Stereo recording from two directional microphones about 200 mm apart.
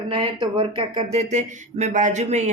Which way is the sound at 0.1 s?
25° right (ahead or behind).